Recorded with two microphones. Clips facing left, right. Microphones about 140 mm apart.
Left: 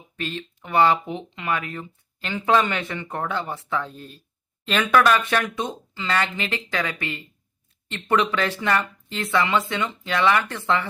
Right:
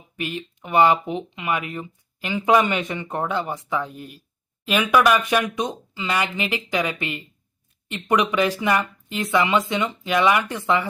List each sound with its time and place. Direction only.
0.2 s speech: 15° right (ahead or behind)